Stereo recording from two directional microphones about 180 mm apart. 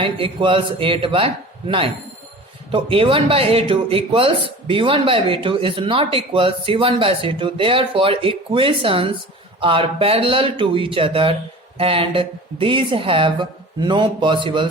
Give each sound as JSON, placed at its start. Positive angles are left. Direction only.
{"t": 0.0, "sound": "speech", "side_deg": -30}